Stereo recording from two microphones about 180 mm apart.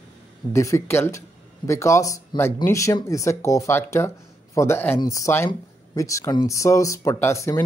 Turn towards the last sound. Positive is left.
turn(degrees=15)  # may be behind; listen again after turning